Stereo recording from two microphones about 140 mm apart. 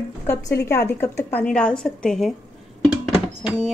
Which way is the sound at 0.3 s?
20° left (ahead or behind).